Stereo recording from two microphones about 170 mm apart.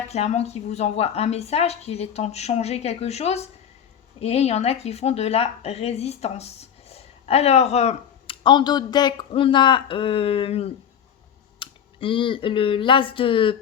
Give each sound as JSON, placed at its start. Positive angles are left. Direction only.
{"t": 0.1, "sound": "speech", "side_deg": 40}